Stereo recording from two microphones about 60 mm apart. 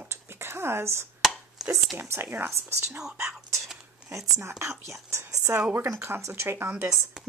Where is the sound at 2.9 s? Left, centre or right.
Centre.